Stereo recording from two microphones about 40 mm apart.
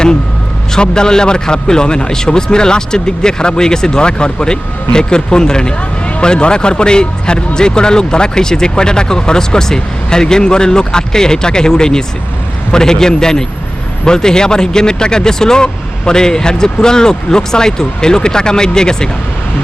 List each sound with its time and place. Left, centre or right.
0.7 s speech: centre